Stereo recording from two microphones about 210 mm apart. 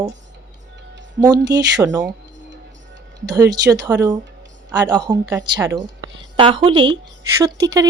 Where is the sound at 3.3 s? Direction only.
20° right (ahead or behind).